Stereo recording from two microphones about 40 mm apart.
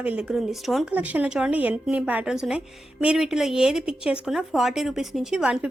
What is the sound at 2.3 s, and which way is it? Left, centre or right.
A woman's voice, centre.